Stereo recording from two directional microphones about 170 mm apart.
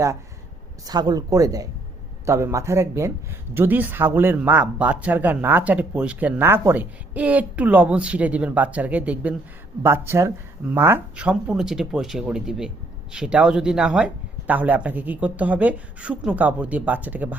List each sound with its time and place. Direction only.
0.9 s speech: 20° right (ahead or behind)